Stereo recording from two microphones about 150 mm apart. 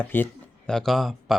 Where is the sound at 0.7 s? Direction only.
Centre (ahead or behind).